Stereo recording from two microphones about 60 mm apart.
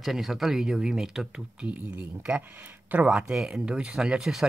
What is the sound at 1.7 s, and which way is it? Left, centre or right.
Speech, right.